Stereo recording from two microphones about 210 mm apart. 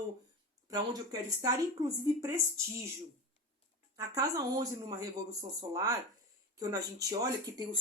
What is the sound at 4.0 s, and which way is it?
Speech, 15° right (ahead or behind).